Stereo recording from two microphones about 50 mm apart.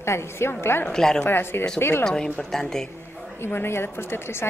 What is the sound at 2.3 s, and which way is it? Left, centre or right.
Speech, centre.